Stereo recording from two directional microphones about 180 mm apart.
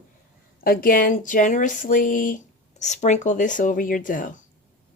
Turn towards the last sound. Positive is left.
turn(degrees=50)  # may be behind; listen again after turning